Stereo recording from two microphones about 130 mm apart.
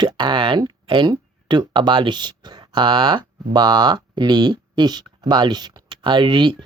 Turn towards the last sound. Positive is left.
turn(degrees=-40)  # may be behind; listen again after turning